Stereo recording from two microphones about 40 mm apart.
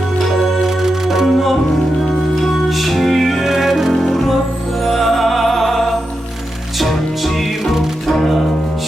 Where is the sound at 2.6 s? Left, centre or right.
Centre.